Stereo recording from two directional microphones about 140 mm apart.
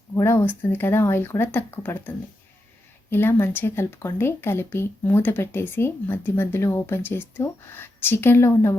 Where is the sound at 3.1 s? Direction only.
15° left (ahead or behind).